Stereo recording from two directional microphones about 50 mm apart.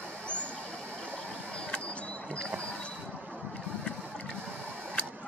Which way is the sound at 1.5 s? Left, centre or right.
Left.